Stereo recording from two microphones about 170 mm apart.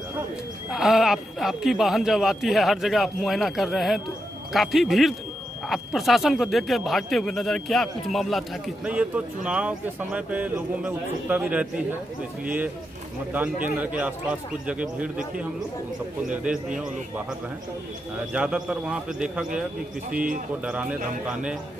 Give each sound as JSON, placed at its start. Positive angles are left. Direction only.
{"t": 0.7, "sound": "speech", "side_deg": 0}
{"t": 13.7, "sound": "speech", "side_deg": -10}
{"t": 18.3, "sound": "speech", "side_deg": -5}
{"t": 20.1, "sound": "a man's voice", "side_deg": -55}
{"t": 20.6, "sound": "speech", "side_deg": -5}